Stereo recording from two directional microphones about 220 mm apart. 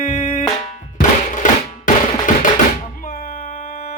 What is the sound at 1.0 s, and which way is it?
Music, 35° left (ahead or behind).